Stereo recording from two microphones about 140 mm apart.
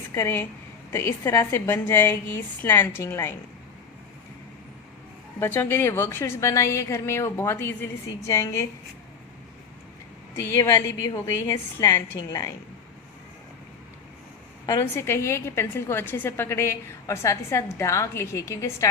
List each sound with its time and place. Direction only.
0.1 s a woman's voice: 20° left (ahead or behind)
5.4 s a woman's voice: 15° left (ahead or behind)
10.5 s a woman's voice: 20° left (ahead or behind)
14.7 s a woman's voice: 20° left (ahead or behind)